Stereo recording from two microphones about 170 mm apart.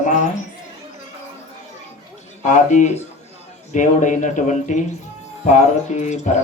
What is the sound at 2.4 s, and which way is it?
Speech, 45° left (ahead or behind).